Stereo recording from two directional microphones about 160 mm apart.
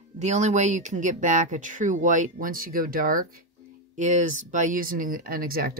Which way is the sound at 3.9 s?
50° right (ahead or behind).